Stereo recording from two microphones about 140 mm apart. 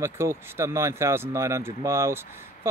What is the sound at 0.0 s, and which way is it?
Speech, 20° right (ahead or behind).